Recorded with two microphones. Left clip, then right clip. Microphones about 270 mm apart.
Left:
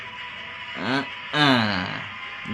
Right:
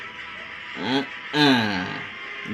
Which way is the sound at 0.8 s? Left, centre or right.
Left.